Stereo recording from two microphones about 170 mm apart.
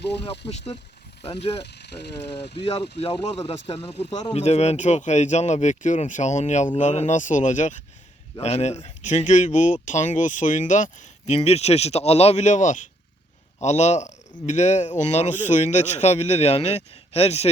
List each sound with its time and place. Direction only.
0.3 s a man's voice: 35° left (ahead or behind)
1.6 s speech: 80° left
2.6 s a man's voice: 30° left (ahead or behind)
4.4 s a man's voice: 40° left (ahead or behind)